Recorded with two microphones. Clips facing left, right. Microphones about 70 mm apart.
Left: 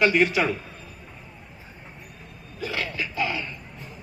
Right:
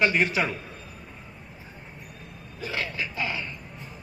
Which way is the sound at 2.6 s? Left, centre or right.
Right.